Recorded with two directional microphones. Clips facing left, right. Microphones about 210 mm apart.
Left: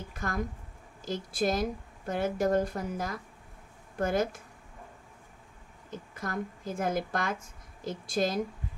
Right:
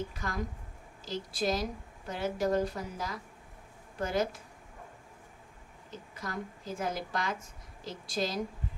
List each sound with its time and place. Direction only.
0.1 s a woman's voice: 50° left (ahead or behind)
5.9 s a woman's voice: 50° left (ahead or behind)